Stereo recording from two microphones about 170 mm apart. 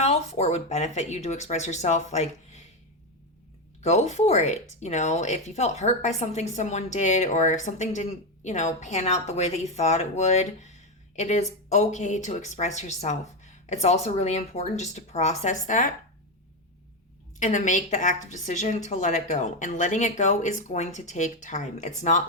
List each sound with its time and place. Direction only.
0.0 s speech: 40° left (ahead or behind)
3.8 s a woman's voice: 40° left (ahead or behind)
17.4 s a woman's voice: 45° left (ahead or behind)